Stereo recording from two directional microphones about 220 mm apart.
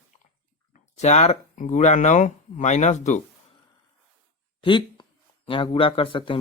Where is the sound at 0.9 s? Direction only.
30° left (ahead or behind).